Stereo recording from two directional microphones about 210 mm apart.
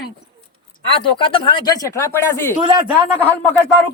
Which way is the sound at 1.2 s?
25° left (ahead or behind).